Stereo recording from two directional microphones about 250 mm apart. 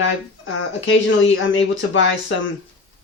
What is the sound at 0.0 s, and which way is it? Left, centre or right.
A woman's voice, left.